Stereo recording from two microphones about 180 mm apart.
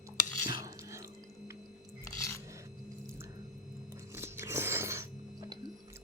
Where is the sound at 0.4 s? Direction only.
20° right (ahead or behind).